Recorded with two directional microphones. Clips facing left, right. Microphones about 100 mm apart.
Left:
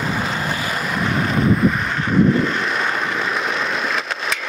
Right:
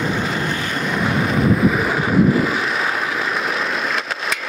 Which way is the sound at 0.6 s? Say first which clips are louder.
Right 1 dB; 5° left (ahead or behind).